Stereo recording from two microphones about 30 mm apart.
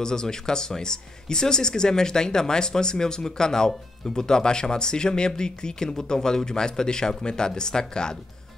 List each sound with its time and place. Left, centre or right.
0.0 s speech: left